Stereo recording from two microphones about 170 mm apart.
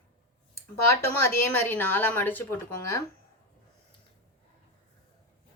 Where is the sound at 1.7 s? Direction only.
10° left (ahead or behind).